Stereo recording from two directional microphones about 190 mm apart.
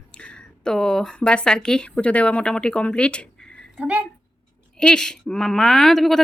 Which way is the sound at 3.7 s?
5° right (ahead or behind).